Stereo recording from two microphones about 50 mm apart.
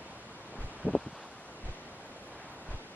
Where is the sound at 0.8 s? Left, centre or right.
Right.